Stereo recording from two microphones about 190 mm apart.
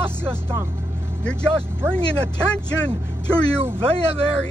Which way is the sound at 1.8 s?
15° right (ahead or behind).